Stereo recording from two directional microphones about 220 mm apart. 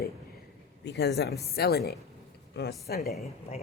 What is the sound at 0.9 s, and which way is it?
Speech, 50° left (ahead or behind).